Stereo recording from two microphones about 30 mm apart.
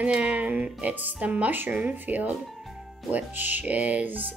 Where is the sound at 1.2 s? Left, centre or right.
Right.